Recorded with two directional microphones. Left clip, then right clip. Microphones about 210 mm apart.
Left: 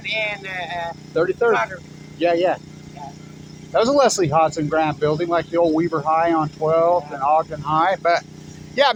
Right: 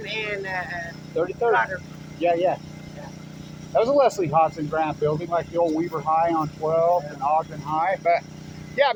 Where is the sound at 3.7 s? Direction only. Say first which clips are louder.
Left 3 dB; 55° left (ahead or behind).